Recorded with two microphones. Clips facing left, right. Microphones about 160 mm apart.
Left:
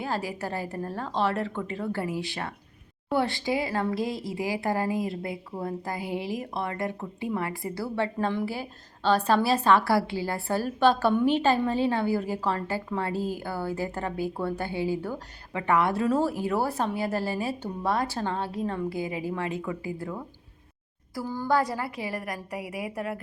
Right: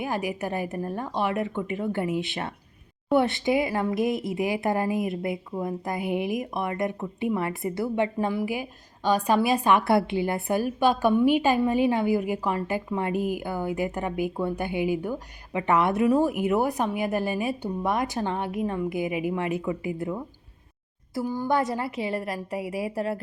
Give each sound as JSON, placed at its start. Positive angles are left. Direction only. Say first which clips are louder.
{"t": 0.0, "sound": "a woman's voice", "louder": "right 2 dB", "side_deg": -15}
{"t": 21.2, "sound": "speech", "louder": "right 1 dB", "side_deg": -15}